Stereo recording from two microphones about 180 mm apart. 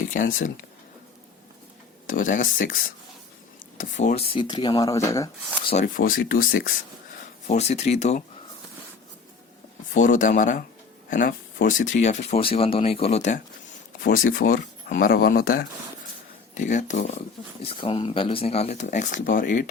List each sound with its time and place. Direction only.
0.1 s speech: 50° left (ahead or behind)
2.0 s speech: 45° left (ahead or behind); by 5.3 s 15° left (ahead or behind)
5.8 s speech: 55° left (ahead or behind)
7.4 s speech: 40° left (ahead or behind)
9.9 s speech: 45° left (ahead or behind)
14.0 s speech: 50° left (ahead or behind)
16.6 s speech: 45° left (ahead or behind)